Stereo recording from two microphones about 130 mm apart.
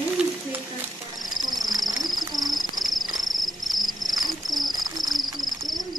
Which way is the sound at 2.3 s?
Centre (ahead or behind).